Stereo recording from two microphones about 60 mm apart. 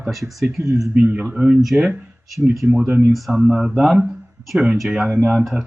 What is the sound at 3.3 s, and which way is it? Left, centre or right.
Speech, centre.